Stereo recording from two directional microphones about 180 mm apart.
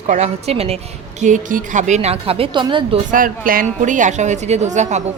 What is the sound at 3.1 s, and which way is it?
A woman's voice, 50° right (ahead or behind).